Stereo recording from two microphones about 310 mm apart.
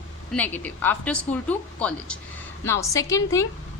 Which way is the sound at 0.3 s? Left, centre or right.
Centre.